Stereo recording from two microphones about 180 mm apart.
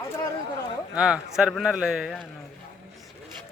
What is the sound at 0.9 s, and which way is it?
A man's voice, 5° right (ahead or behind).